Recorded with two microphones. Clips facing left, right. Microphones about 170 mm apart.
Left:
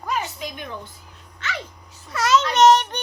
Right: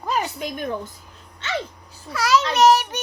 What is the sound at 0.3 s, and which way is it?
Speech, 50° right (ahead or behind).